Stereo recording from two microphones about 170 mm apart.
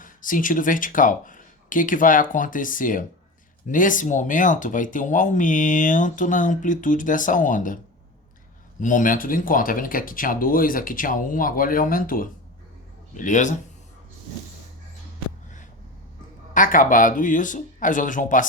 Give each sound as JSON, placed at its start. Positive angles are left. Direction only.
{"t": 0.0, "sound": "speech", "side_deg": 50}
{"t": 8.8, "sound": "speech", "side_deg": 50}
{"t": 16.6, "sound": "speech", "side_deg": 50}